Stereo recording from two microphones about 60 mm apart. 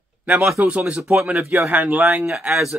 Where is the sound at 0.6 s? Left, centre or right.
Right.